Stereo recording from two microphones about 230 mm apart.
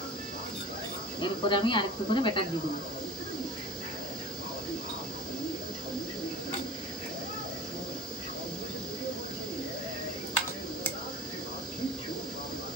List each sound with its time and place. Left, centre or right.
1.2 s speech: left